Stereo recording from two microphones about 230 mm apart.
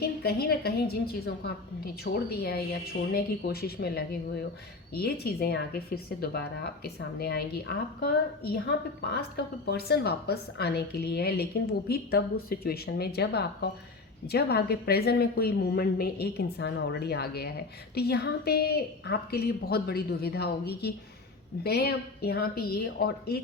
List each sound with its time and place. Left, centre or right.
0.0 s a woman's voice: left